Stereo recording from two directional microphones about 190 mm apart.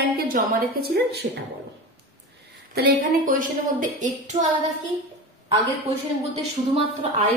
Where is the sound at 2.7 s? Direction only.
50° right (ahead or behind).